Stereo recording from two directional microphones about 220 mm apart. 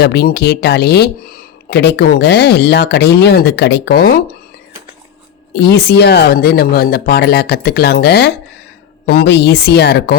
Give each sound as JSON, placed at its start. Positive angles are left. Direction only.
{"t": 0.0, "sound": "speech", "side_deg": 45}
{"t": 5.5, "sound": "speech", "side_deg": 45}